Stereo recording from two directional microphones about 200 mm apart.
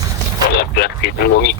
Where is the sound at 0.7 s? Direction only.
55° left (ahead or behind).